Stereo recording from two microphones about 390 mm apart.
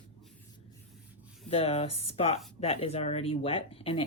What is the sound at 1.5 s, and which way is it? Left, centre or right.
Speech, centre.